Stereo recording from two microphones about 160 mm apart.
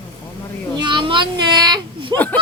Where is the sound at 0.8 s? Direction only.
30° right (ahead or behind).